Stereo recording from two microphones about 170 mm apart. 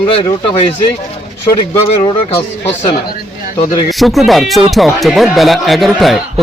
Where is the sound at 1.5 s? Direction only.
20° left (ahead or behind).